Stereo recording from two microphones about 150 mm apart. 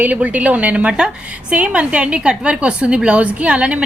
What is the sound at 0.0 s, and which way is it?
A woman's voice, 10° right (ahead or behind).